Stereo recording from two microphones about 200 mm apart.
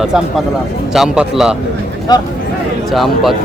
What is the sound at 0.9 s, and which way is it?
Speech, 5° right (ahead or behind).